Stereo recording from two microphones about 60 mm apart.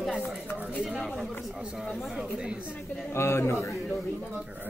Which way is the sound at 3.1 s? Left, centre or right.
Left.